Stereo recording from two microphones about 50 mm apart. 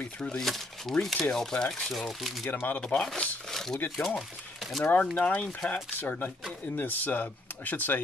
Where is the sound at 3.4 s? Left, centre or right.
Centre.